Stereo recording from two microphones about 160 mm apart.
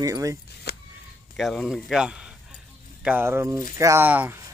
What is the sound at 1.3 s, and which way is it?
Speech, centre (ahead or behind).